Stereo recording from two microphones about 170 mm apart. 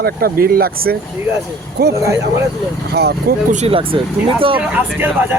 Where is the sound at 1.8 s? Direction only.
70° right (ahead or behind).